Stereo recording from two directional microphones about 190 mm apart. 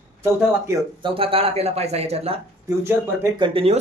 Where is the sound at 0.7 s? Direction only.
15° right (ahead or behind).